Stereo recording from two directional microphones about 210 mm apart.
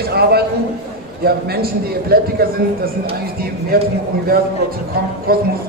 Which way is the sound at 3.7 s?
45° right (ahead or behind).